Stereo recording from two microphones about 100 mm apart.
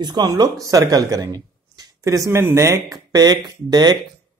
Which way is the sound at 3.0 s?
40° right (ahead or behind).